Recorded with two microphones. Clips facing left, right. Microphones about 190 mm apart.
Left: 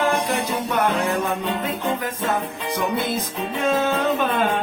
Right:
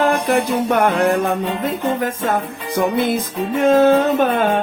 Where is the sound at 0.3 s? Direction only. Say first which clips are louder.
Right 7 dB; 55° right (ahead or behind).